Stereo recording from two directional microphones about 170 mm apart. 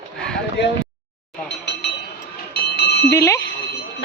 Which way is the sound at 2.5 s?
75° left (ahead or behind).